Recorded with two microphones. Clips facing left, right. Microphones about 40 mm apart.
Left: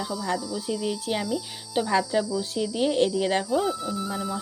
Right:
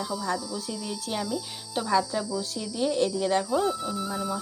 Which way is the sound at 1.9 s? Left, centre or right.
Left.